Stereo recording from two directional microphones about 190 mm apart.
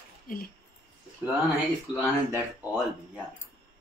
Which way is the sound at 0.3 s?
45° left (ahead or behind).